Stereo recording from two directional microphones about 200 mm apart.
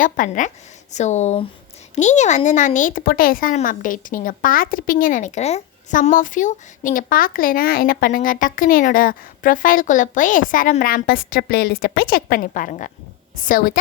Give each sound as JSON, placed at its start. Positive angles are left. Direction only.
{"t": 0.0, "sound": "a woman's voice", "side_deg": 40}